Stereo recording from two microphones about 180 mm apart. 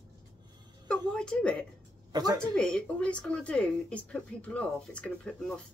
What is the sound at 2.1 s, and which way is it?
Speech, 20° right (ahead or behind).